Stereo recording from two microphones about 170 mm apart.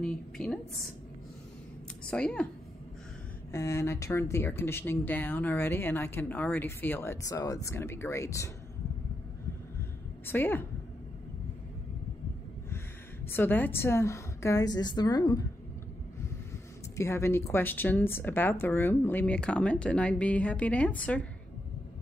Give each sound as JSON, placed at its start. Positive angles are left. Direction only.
{"t": 0.0, "sound": "a woman's voice", "side_deg": 5}
{"t": 2.0, "sound": "a woman's voice", "side_deg": 5}
{"t": 3.5, "sound": "speech", "side_deg": 15}
{"t": 10.2, "sound": "speech", "side_deg": 10}
{"t": 13.3, "sound": "speech", "side_deg": 10}
{"t": 16.9, "sound": "speech", "side_deg": 15}